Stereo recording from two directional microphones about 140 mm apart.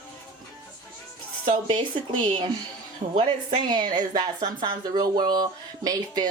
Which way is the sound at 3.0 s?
85° right.